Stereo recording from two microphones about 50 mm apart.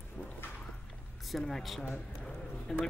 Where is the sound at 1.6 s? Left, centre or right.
Centre.